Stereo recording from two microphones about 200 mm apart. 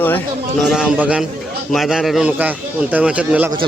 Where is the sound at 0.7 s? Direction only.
5° right (ahead or behind).